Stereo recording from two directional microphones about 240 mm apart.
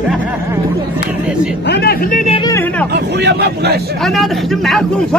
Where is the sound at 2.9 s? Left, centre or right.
Right.